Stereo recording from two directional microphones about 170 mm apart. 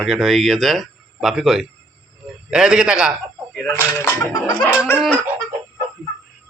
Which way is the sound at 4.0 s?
15° left (ahead or behind).